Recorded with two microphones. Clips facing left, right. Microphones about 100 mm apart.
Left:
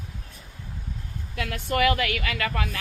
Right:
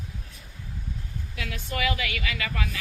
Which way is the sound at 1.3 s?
55° left (ahead or behind).